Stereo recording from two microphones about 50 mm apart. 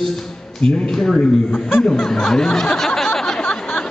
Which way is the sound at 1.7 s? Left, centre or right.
Centre.